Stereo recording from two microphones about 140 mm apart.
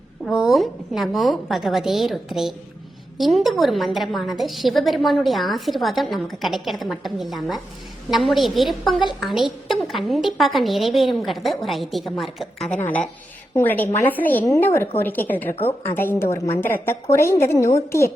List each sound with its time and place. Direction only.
0.3 s a woman's voice: centre (ahead or behind); by 18.1 s 20° left (ahead or behind)